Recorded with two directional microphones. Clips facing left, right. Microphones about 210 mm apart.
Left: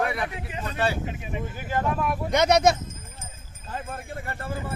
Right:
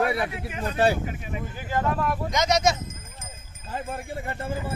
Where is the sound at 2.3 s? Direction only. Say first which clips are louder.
Left 5 dB; 60° left (ahead or behind).